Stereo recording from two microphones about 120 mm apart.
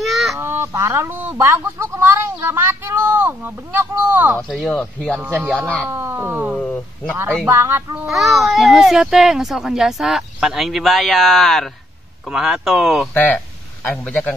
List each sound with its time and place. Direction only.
0.0 s a sound: centre (ahead or behind)
0.4 s speech: 20° right (ahead or behind)
4.4 s speech: centre (ahead or behind)
5.2 s speech: 15° right (ahead or behind)
6.6 s speech: 10° left (ahead or behind)
7.4 s speech: 20° right (ahead or behind)
8.1 s speech: centre (ahead or behind)
13.1 s speech: 15° left (ahead or behind)